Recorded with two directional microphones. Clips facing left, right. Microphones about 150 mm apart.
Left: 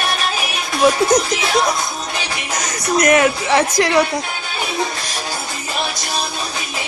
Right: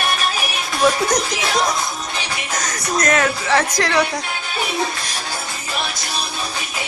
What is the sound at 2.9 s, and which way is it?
Speech, 15° left (ahead or behind).